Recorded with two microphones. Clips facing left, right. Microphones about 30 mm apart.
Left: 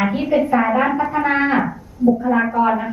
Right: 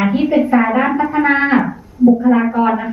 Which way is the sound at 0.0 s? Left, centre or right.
Centre.